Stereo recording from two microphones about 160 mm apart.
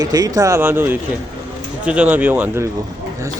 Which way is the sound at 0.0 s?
25° right (ahead or behind).